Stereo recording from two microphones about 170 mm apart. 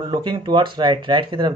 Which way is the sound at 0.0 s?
25° right (ahead or behind).